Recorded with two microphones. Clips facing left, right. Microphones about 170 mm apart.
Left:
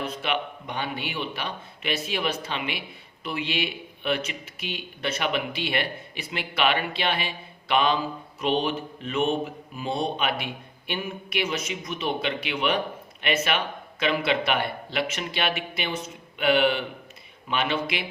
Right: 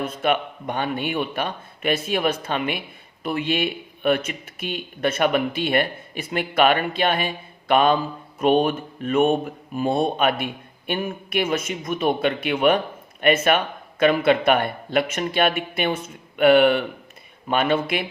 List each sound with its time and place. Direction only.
0.0 s speech: 50° right (ahead or behind)